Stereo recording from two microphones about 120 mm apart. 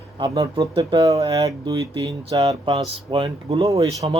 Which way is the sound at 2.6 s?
45° right (ahead or behind).